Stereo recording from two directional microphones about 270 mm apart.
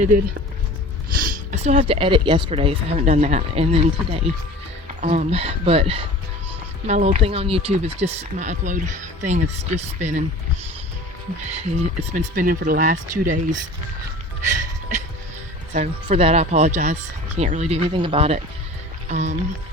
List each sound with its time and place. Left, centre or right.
1.2 s speech: right
11.3 s speech: right
14.4 s music: right
15.7 s speech: right